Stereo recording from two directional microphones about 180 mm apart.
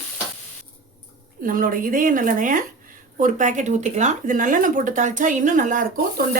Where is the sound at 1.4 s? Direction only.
50° right (ahead or behind).